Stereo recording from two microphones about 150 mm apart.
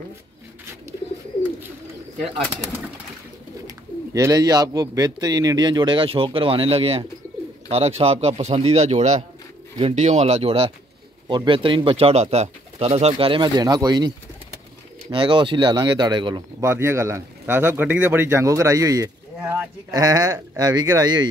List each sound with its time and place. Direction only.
3.6 s a man's voice: 25° right (ahead or behind)
16.6 s a man's voice: 15° right (ahead or behind)